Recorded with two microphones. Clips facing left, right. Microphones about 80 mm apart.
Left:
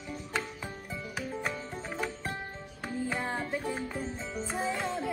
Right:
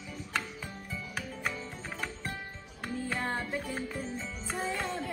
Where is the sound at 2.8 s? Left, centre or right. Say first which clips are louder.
Left 1 dB; centre.